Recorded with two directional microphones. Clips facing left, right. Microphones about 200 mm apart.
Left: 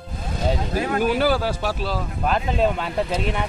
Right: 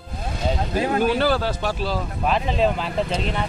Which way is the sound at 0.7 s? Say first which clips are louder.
Right 4 dB; 25° right (ahead or behind).